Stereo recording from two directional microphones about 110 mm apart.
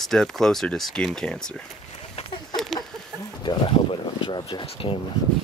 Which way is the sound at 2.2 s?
70° left (ahead or behind).